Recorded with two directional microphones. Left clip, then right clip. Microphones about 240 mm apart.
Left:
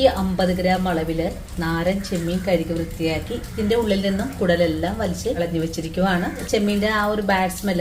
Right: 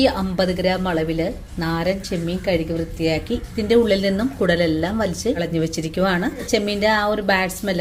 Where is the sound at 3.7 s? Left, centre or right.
Right.